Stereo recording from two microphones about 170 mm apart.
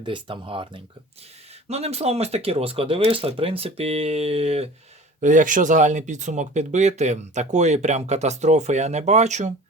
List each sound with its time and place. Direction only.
0.0 s speech: 30° right (ahead or behind)
5.2 s speech: 50° right (ahead or behind)